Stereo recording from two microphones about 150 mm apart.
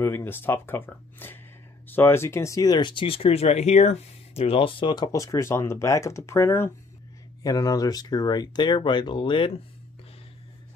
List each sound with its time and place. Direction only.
0.0 s speech: 15° left (ahead or behind); by 9.5 s 35° left (ahead or behind)